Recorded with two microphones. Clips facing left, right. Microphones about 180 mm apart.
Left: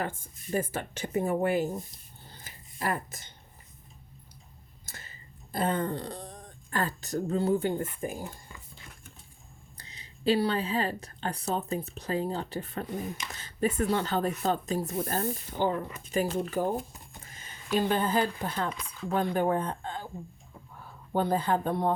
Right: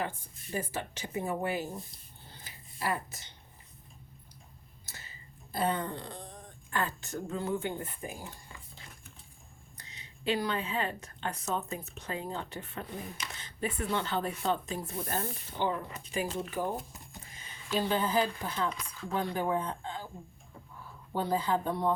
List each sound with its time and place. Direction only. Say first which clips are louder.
0.5 s speech: left 5 dB; 50° left (ahead or behind)
2.4 s a sound: left 3 dB; 50° left (ahead or behind)
5.5 s speech: left 3 dB; 50° left (ahead or behind)
9.7 s speech: left 1 dB; 35° left (ahead or behind)
17.7 s speech: left 2 dB; 55° left (ahead or behind)
21.1 s speech: left 3 dB; 55° left (ahead or behind)